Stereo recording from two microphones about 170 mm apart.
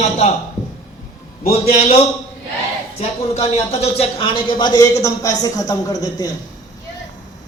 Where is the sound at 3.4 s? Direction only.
40° left (ahead or behind); by 6.3 s 20° left (ahead or behind).